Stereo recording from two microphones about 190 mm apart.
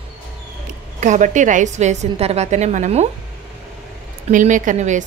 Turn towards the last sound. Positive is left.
turn(degrees=-40)  # may be behind; listen again after turning